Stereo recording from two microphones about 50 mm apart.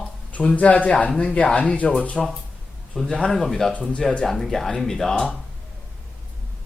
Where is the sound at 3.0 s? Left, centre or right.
Centre.